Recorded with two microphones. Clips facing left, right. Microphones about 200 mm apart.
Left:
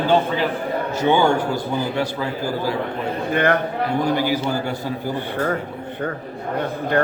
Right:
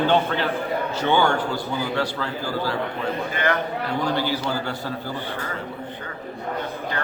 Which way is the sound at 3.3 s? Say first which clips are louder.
Left 7 dB; 55° left (ahead or behind).